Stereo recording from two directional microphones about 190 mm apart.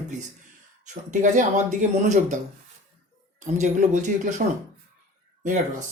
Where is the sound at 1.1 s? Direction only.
40° right (ahead or behind).